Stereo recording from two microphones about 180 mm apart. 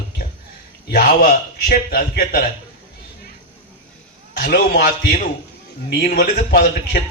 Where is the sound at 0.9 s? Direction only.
60° left (ahead or behind).